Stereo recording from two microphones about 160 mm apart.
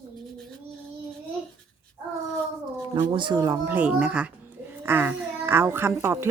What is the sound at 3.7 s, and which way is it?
A child's voice, 10° right (ahead or behind).